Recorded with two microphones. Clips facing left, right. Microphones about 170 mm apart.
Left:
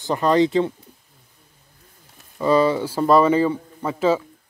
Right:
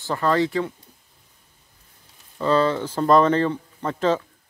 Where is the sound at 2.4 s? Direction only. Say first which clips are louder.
Left 3 dB; 10° left (ahead or behind).